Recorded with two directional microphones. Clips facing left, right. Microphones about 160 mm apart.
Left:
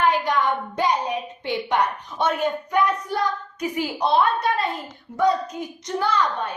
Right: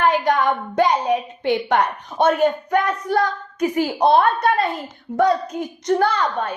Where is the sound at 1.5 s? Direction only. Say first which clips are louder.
Right 4 dB; 55° right (ahead or behind).